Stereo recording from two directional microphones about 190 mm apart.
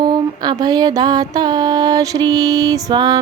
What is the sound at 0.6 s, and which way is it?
Mantra, 20° right (ahead or behind).